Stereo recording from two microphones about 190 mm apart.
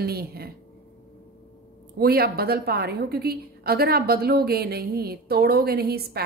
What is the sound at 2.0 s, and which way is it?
A woman's voice, 55° right (ahead or behind).